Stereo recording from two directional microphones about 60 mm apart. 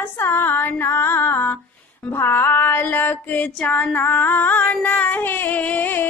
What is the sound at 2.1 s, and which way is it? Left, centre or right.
Music, left.